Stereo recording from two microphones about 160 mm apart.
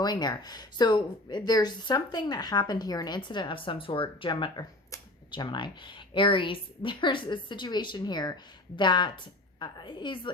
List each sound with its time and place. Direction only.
0.0 s speech: 25° left (ahead or behind)